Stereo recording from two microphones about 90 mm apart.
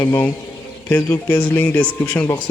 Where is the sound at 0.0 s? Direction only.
25° left (ahead or behind).